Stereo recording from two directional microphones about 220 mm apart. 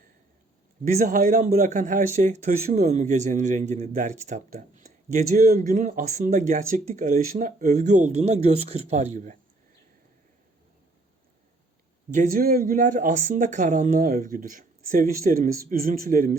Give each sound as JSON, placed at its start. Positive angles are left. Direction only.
{"t": 0.9, "sound": "speech", "side_deg": -35}
{"t": 12.1, "sound": "speech", "side_deg": -40}